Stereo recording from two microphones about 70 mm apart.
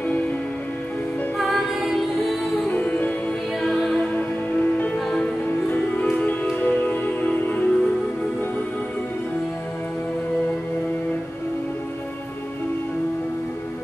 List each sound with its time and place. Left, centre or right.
1.4 s music: centre
2.7 s music: left
3.6 s music: centre
4.6 s music: left